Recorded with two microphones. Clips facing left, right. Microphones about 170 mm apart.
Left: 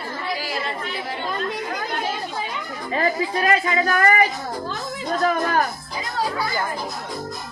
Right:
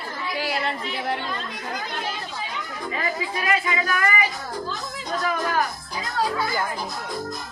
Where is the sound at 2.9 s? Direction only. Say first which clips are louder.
Left 7 dB; 40° left (ahead or behind).